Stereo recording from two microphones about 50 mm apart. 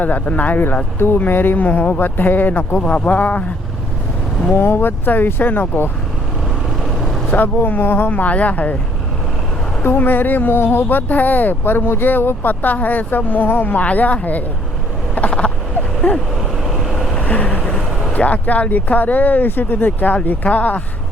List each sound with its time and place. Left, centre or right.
0.0 s speech: left
0.9 s speech: left
1.2 s speech: left
4.5 s speech: left
7.3 s speech: left
9.8 s speech: left
15.3 s a sound: left
16.6 s vehicle: centre
17.2 s vehicle: left
18.1 s speech: left